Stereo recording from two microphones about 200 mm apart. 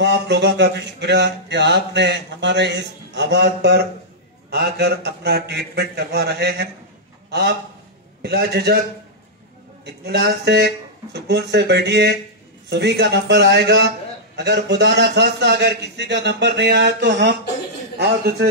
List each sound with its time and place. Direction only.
0.0 s a man's voice: 60° right (ahead or behind)
9.8 s a man's voice: 55° right (ahead or behind)